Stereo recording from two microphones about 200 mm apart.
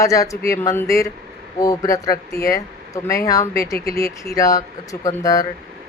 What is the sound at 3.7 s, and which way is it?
Speech, 50° left (ahead or behind).